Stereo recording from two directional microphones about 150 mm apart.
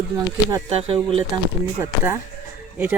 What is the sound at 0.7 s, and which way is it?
Speech, 40° right (ahead or behind).